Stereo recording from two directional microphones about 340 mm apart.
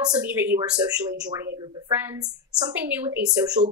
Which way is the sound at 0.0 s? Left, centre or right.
Centre.